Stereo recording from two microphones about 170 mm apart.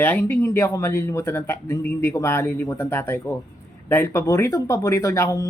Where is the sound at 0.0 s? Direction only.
10° left (ahead or behind).